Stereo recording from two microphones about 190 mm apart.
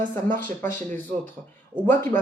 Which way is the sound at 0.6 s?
40° right (ahead or behind).